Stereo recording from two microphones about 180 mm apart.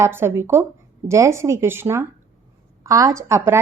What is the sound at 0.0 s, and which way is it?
A woman's voice, 15° right (ahead or behind).